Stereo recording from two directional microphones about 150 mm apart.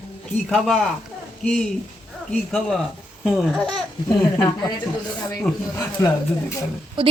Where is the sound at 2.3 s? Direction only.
5° left (ahead or behind).